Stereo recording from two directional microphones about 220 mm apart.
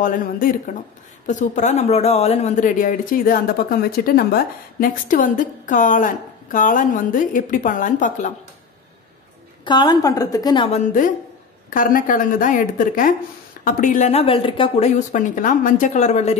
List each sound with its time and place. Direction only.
0.0 s speech: 40° left (ahead or behind)
9.7 s a woman's voice: 20° left (ahead or behind)
11.7 s speech: 40° left (ahead or behind)